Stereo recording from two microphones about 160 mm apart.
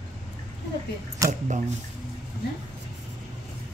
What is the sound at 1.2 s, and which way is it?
Speech, 20° right (ahead or behind).